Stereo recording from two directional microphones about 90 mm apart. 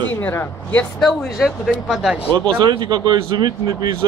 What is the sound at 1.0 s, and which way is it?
Speech, centre (ahead or behind).